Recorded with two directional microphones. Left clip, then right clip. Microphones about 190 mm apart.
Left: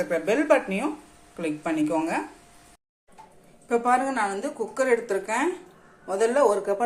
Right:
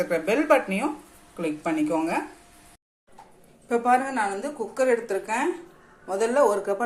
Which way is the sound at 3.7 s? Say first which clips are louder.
Even; 10° left (ahead or behind).